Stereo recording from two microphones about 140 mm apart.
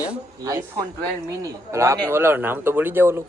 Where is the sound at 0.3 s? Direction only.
25° right (ahead or behind).